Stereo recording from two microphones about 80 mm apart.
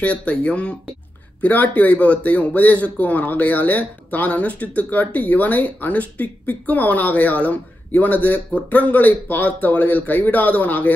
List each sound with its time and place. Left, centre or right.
0.0 s speech: centre